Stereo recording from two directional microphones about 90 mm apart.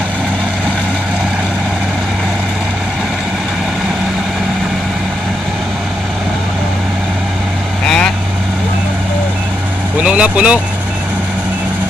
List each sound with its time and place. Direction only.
7.9 s vehicle: 10° left (ahead or behind)
10.0 s speech: 15° right (ahead or behind)